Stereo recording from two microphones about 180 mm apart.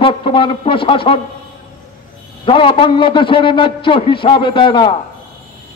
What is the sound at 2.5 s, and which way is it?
A man's voice, 30° left (ahead or behind).